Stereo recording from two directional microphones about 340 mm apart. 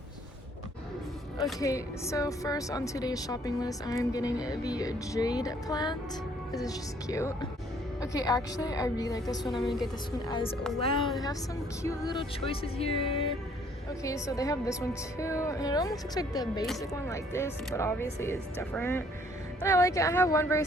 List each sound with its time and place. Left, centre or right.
1.5 s speech: centre
9.4 s a woman's voice: centre
9.8 s speech: centre